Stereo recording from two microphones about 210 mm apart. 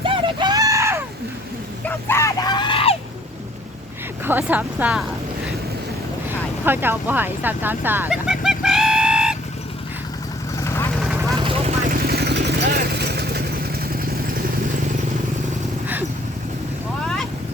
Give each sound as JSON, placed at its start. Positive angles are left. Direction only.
{"t": 0.0, "sound": "screaming", "side_deg": -25}
{"t": 2.0, "sound": "screaming", "side_deg": 15}
{"t": 4.2, "sound": "speech", "side_deg": -10}
{"t": 6.7, "sound": "speech", "side_deg": -10}
{"t": 10.6, "sound": "vehicle", "side_deg": 15}
{"t": 11.3, "sound": "vehicle", "side_deg": -25}
{"t": 11.9, "sound": "vehicle", "side_deg": -45}